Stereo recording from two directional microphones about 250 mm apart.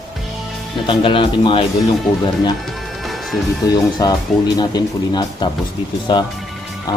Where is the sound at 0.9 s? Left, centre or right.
Centre.